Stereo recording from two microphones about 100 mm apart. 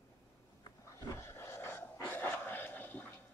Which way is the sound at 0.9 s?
25° left (ahead or behind).